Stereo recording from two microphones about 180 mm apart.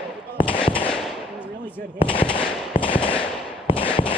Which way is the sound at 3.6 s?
30° left (ahead or behind).